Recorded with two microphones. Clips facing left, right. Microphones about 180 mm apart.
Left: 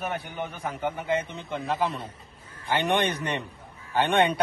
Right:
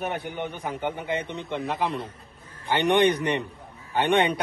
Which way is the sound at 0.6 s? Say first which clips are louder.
Left 2 dB; 15° right (ahead or behind).